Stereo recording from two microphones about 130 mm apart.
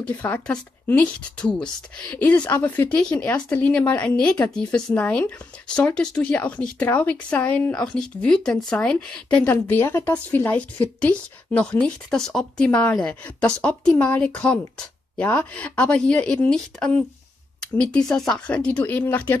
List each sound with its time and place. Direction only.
0.0 s speech: 10° left (ahead or behind)